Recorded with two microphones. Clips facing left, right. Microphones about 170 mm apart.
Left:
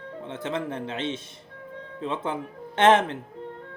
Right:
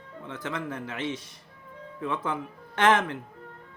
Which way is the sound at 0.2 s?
25° left (ahead or behind).